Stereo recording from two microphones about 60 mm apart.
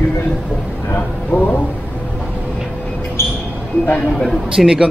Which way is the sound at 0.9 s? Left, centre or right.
Left.